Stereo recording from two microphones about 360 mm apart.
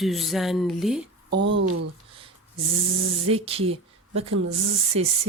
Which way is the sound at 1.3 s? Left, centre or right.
Right.